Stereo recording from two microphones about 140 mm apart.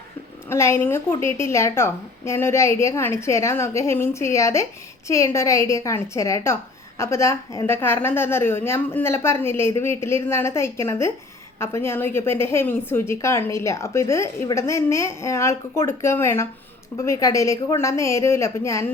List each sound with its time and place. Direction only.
0.5 s a woman's voice: 20° left (ahead or behind)